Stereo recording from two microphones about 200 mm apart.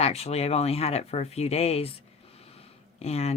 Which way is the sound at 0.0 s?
30° left (ahead or behind).